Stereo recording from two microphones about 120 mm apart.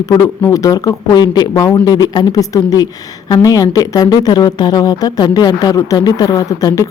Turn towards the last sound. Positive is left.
turn(degrees=30)  # may be behind; listen again after turning